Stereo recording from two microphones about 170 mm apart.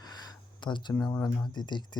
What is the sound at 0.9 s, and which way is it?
Speech, 15° left (ahead or behind).